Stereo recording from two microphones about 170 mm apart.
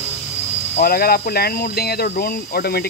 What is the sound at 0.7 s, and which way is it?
Speech, 60° left (ahead or behind).